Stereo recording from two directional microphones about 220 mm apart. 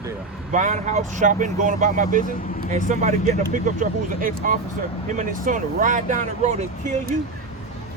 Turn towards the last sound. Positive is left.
turn(degrees=-35)  # may be behind; listen again after turning